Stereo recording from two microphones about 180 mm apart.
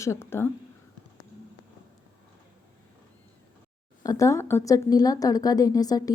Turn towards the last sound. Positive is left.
turn(degrees=20)  # may be behind; listen again after turning